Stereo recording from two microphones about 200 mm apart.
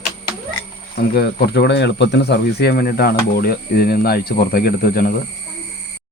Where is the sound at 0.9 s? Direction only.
50° left (ahead or behind).